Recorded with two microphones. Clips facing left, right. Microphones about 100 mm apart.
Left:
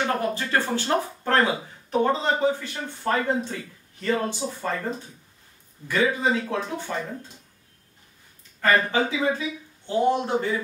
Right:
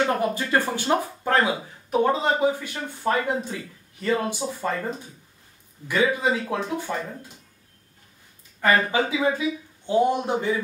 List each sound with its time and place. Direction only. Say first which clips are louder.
0.2 s speech: right 2 dB; 15° right (ahead or behind)
5.9 s speech: right 1 dB; 10° right (ahead or behind)
8.5 s speech: even; 10° right (ahead or behind)